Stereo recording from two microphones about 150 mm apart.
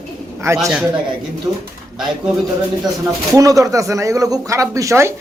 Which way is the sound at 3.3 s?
20° right (ahead or behind).